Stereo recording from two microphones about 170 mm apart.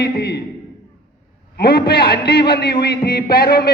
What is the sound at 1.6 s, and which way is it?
A man's voice, 65° left (ahead or behind).